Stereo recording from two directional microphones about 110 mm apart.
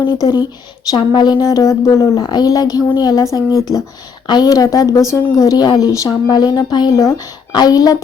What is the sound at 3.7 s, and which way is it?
Speech, 30° left (ahead or behind).